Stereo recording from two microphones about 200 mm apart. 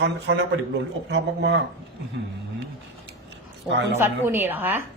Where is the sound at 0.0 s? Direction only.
65° right (ahead or behind).